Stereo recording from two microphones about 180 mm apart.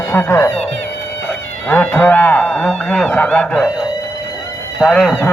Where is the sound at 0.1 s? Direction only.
15° left (ahead or behind).